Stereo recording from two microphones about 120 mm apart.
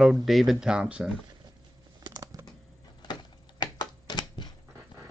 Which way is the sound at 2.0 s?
30° right (ahead or behind).